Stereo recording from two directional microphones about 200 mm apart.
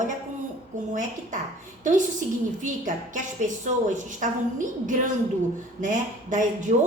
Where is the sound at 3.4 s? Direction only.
40° right (ahead or behind).